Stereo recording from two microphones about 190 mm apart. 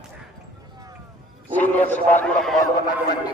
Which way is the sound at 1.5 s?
10° left (ahead or behind).